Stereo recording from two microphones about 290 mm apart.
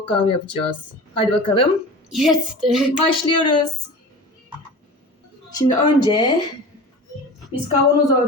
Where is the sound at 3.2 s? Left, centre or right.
Centre.